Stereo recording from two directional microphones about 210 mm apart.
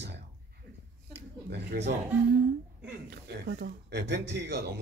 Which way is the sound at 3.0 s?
50° right (ahead or behind).